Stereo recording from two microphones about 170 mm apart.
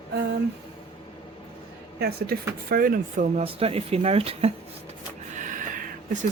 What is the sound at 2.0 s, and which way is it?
Speech, 65° right (ahead or behind).